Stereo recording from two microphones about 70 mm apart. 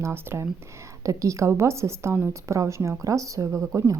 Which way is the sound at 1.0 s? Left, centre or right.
Right.